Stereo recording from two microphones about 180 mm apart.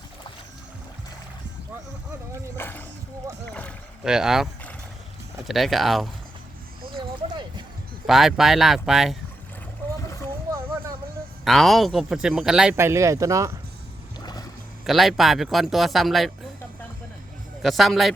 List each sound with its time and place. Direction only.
2.6 s boat: 10° left (ahead or behind)
4.0 s speech: 5° right (ahead or behind)
5.5 s speech: centre (ahead or behind)
6.9 s a sound: 25° right (ahead or behind)
8.0 s speech: centre (ahead or behind)
10.5 s a sound: 15° right (ahead or behind)
11.4 s speech: centre (ahead or behind); by 13.5 s 15° right (ahead or behind)
14.8 s speech: centre (ahead or behind)
17.6 s speech: centre (ahead or behind)